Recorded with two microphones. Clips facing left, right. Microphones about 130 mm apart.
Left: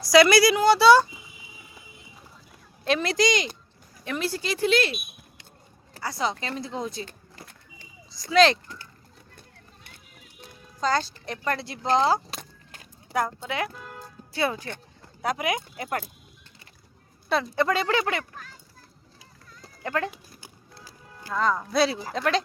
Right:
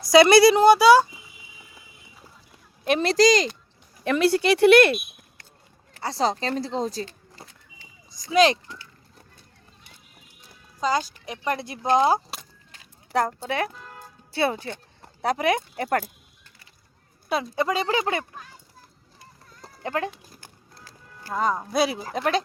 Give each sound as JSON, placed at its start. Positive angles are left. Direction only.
{"t": 0.1, "sound": "speech", "side_deg": -25}
{"t": 0.7, "sound": "speech", "side_deg": -10}
{"t": 3.0, "sound": "speech", "side_deg": -35}
{"t": 4.0, "sound": "speech", "side_deg": -70}
{"t": 6.0, "sound": "speech", "side_deg": -30}
{"t": 8.1, "sound": "speech", "side_deg": -15}
{"t": 8.6, "sound": "a sound", "side_deg": 50}
{"t": 10.8, "sound": "speech", "side_deg": -10}
{"t": 13.1, "sound": "speech", "side_deg": -35}
{"t": 17.5, "sound": "speech", "side_deg": -15}
{"t": 19.8, "sound": "speech", "side_deg": -20}
{"t": 21.3, "sound": "speech", "side_deg": -15}